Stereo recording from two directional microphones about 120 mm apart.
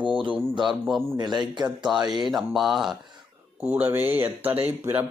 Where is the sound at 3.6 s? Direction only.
15° right (ahead or behind).